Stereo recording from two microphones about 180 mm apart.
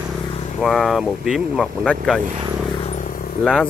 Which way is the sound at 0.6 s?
Centre (ahead or behind).